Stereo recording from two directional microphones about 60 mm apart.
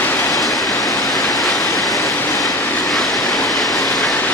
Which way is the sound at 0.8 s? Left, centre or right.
Left.